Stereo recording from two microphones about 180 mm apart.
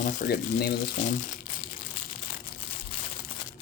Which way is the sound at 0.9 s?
45° left (ahead or behind).